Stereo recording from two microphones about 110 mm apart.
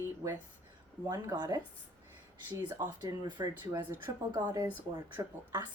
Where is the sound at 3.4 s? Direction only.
35° right (ahead or behind).